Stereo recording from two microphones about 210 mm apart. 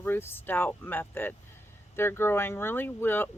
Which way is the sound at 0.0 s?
10° left (ahead or behind).